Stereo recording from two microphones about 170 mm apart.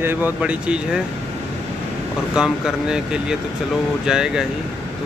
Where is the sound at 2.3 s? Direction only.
5° right (ahead or behind).